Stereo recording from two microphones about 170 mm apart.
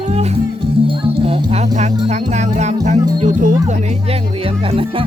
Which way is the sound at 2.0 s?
40° right (ahead or behind).